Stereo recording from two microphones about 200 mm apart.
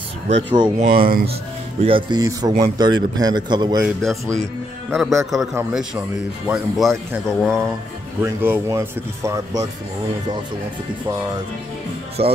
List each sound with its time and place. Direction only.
0.3 s speech: 30° right (ahead or behind)
3.8 s speech: centre (ahead or behind)
8.2 s speech: 10° right (ahead or behind)
12.2 s speech: 30° right (ahead or behind)